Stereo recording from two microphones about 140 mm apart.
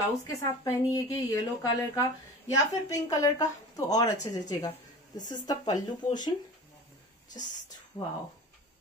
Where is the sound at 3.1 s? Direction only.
25° left (ahead or behind).